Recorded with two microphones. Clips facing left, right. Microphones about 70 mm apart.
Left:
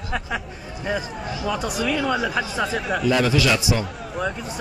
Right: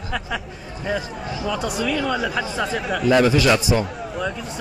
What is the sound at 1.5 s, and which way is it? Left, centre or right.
Speech, centre.